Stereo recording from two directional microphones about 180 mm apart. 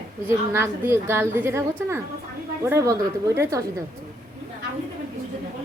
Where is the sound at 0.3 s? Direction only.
15° right (ahead or behind).